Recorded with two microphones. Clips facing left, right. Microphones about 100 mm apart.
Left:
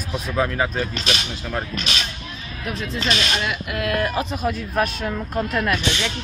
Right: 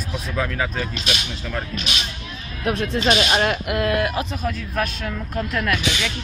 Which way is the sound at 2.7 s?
50° right (ahead or behind).